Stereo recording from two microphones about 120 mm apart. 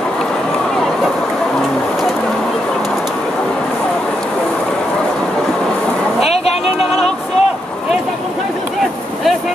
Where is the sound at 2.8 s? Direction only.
Centre (ahead or behind).